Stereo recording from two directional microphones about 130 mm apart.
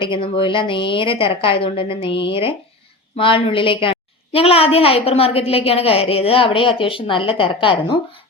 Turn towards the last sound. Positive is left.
turn(degrees=40)  # may be behind; listen again after turning